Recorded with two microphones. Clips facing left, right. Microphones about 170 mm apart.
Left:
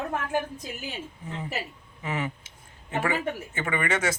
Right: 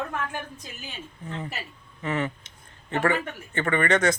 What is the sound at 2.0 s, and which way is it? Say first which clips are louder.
Speech: right 3 dB; 10° left (ahead or behind).